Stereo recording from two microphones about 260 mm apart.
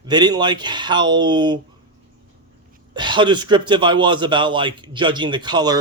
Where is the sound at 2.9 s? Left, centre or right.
Centre.